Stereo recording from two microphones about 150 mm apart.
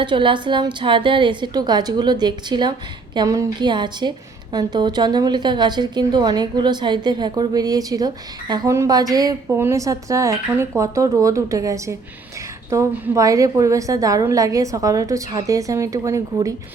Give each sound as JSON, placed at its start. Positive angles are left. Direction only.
{"t": 0.0, "sound": "a woman's voice", "side_deg": -35}